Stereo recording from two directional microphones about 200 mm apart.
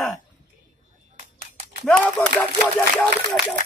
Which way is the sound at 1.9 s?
5° left (ahead or behind).